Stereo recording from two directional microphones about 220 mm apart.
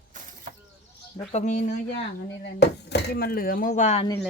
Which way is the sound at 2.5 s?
50° left (ahead or behind).